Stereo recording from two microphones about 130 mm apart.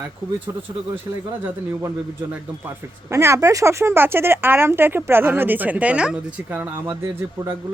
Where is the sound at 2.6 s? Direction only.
20° right (ahead or behind).